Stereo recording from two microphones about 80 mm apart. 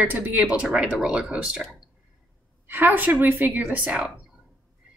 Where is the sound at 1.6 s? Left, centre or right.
Centre.